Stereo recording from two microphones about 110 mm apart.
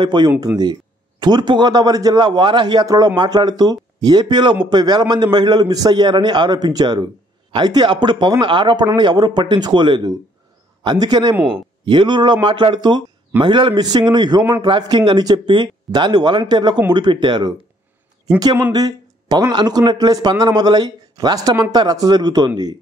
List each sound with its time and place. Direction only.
0.0 s speech: 45° right (ahead or behind)
11.3 s speech: 10° right (ahead or behind)
11.8 s speech: 45° right (ahead or behind)